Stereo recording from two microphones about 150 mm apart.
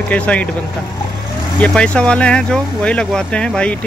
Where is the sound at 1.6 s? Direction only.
5° left (ahead or behind).